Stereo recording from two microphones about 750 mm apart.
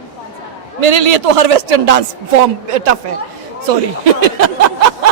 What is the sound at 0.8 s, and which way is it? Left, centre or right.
Speech, right.